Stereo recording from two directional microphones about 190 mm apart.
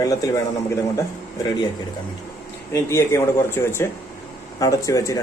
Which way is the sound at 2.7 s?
15° left (ahead or behind).